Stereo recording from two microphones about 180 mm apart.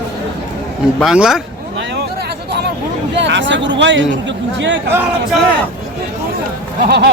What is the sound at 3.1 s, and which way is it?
Speech, 80° right.